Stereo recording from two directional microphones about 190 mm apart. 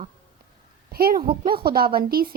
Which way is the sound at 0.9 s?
50° right (ahead or behind).